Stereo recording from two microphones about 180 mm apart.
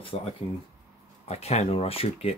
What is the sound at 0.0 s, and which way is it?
Speech, 30° left (ahead or behind).